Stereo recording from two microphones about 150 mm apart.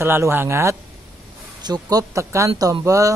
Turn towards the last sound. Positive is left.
turn(degrees=-20)  # may be behind; listen again after turning